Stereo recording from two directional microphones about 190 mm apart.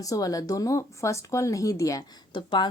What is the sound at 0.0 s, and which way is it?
A woman's voice, 20° left (ahead or behind).